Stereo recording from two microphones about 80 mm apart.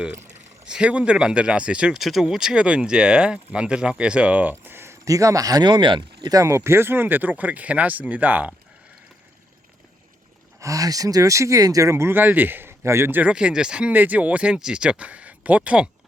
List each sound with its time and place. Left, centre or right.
0.6 s speech: centre
2.0 s speech: centre; by 4.9 s right
5.0 s speech: right
6.3 s speech: right
10.6 s speech: right
13.3 s speech: centre